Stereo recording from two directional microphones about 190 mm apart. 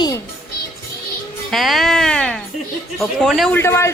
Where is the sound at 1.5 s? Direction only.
Centre (ahead or behind).